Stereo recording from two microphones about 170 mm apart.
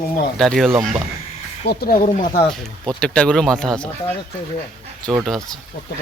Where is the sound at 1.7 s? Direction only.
65° left (ahead or behind).